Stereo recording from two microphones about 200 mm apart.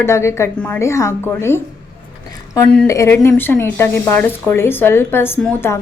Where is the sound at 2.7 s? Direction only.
10° left (ahead or behind).